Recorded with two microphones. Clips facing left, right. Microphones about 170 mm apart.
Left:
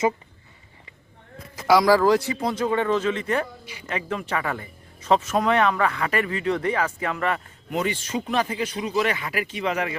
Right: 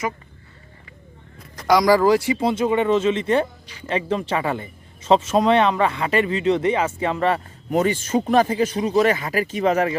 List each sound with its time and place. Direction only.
1.5 s speech: 5° left (ahead or behind)
2.4 s speech: 25° right (ahead or behind)
7.7 s speech: 45° right (ahead or behind)